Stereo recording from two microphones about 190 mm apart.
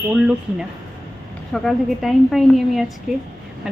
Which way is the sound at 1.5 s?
Centre (ahead or behind).